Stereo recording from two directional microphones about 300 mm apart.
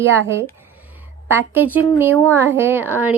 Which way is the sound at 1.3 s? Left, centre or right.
Centre.